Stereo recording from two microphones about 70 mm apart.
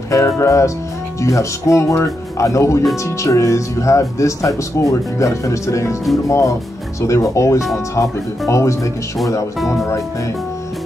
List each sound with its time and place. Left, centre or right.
0.1 s speech: left
9.6 s speech: centre